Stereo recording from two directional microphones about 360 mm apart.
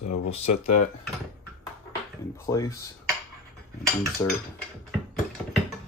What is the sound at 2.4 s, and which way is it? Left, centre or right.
Speech, centre.